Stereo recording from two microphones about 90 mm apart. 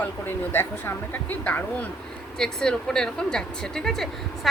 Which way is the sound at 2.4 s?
5° left (ahead or behind).